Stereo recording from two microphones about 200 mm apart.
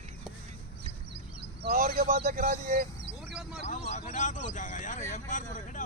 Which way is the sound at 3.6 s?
40° left (ahead or behind).